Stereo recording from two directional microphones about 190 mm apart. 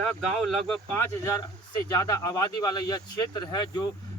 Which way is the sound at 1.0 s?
15° left (ahead or behind).